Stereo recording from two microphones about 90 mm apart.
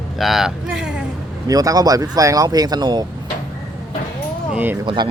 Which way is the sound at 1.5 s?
45° right (ahead or behind).